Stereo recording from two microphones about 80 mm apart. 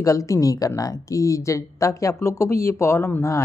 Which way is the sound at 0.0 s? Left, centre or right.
Left.